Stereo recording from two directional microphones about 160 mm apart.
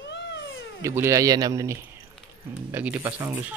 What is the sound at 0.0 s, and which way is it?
Cat, 90° left.